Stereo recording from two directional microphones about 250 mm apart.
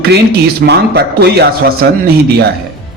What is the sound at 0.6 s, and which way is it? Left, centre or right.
A man's voice, right.